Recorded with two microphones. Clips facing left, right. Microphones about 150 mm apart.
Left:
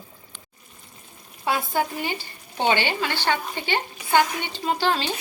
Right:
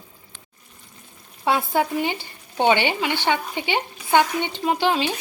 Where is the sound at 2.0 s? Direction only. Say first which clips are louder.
Right 5 dB; 20° right (ahead or behind).